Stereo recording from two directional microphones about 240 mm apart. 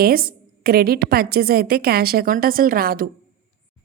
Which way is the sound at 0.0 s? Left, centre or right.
Right.